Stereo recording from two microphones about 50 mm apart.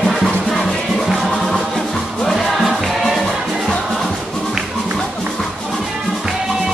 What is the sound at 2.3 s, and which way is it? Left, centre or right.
Music, centre.